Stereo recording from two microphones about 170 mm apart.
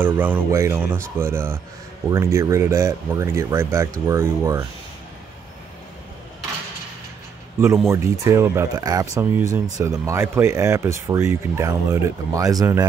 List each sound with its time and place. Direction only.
0.0 s speech: 10° right (ahead or behind)
7.9 s speech: 15° right (ahead or behind)